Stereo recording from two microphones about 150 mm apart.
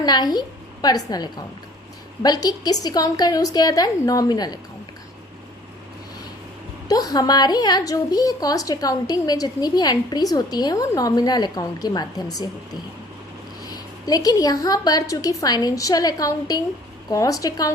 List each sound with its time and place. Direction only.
0.0 s a woman's voice: 30° left (ahead or behind)
6.8 s a woman's voice: 25° left (ahead or behind)
13.7 s a woman's voice: 25° left (ahead or behind)